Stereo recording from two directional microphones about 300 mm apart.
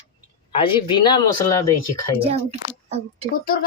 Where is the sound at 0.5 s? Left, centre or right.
Centre.